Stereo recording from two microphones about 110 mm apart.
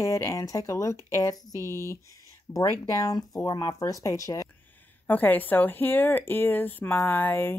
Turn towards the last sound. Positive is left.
turn(degrees=20)  # may be behind; listen again after turning